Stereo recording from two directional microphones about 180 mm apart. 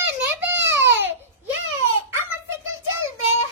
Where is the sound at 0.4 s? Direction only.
15° right (ahead or behind).